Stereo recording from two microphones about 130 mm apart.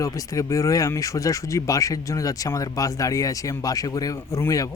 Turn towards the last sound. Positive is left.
turn(degrees=25)  # may be behind; listen again after turning